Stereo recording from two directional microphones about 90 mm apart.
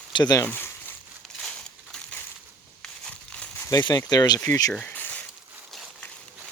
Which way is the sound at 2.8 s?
15° left (ahead or behind).